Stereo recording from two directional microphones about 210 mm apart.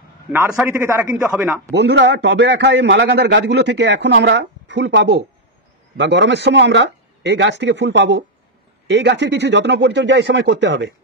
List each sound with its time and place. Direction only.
0.3 s a man's voice: 10° right (ahead or behind)
1.7 s a man's voice: 55° right (ahead or behind)